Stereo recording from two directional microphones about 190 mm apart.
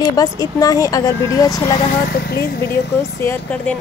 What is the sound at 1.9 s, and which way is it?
Speech, 50° left (ahead or behind).